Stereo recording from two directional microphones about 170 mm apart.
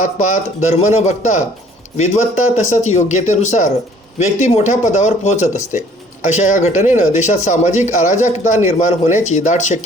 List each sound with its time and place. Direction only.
0.0 s speech: 45° left (ahead or behind)